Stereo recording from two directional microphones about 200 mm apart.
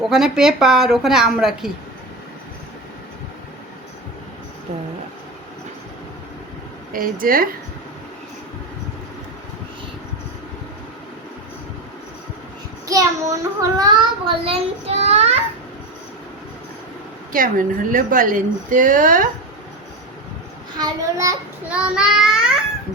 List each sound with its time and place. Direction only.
0.1 s a woman's voice: 5° right (ahead or behind)
6.9 s a woman's voice: 45° right (ahead or behind)
12.9 s a child's voice: 15° right (ahead or behind); by 15.4 s 30° right (ahead or behind)
17.3 s a woman's voice: 45° right (ahead or behind)
20.7 s a child's voice: 20° right (ahead or behind)